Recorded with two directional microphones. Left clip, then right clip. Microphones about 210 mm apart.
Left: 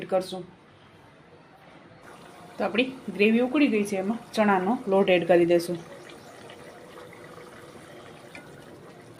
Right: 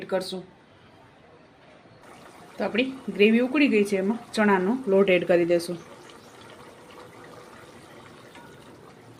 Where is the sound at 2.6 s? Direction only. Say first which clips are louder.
Even; 5° right (ahead or behind).